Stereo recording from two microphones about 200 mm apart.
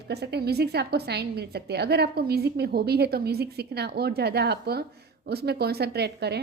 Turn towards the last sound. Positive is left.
turn(degrees=-55)  # may be behind; listen again after turning